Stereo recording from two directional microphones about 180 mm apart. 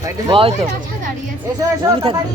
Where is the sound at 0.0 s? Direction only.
25° right (ahead or behind).